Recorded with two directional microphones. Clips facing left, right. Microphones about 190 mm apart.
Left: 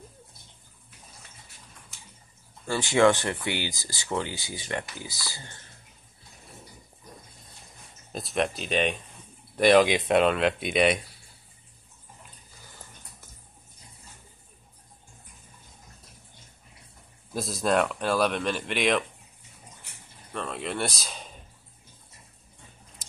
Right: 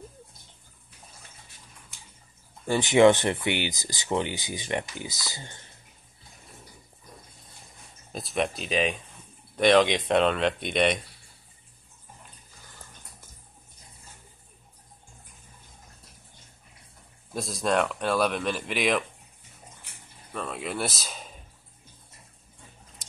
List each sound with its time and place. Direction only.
2.6 s speech: 20° right (ahead or behind)
8.1 s speech: centre (ahead or behind)
17.3 s speech: centre (ahead or behind)
20.3 s speech: centre (ahead or behind)